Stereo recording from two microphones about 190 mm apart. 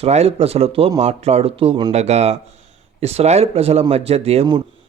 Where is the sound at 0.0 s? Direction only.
35° right (ahead or behind).